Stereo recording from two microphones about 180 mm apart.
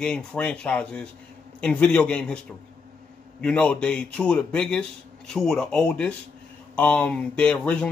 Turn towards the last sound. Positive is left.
turn(degrees=5)  # may be behind; listen again after turning